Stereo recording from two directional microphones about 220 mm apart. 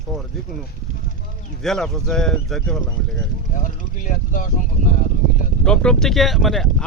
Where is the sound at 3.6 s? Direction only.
35° left (ahead or behind).